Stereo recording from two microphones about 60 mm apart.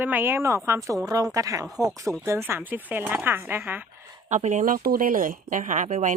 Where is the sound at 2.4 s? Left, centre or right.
Right.